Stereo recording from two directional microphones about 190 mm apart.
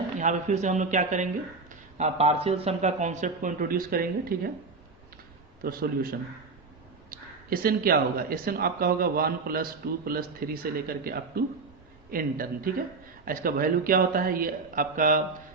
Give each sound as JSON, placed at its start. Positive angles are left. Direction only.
{"t": 0.2, "sound": "speech", "side_deg": -40}
{"t": 5.6, "sound": "speech", "side_deg": -50}